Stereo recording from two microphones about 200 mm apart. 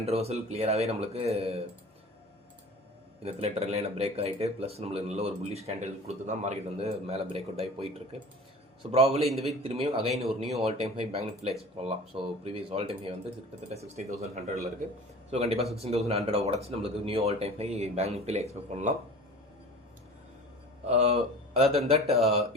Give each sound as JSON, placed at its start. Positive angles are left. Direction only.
{"t": 0.0, "sound": "speech", "side_deg": -30}
{"t": 3.2, "sound": "speech", "side_deg": -30}
{"t": 20.8, "sound": "speech", "side_deg": -30}